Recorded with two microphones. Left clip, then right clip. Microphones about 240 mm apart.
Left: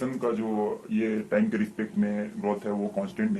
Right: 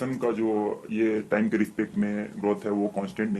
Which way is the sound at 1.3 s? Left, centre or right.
Right.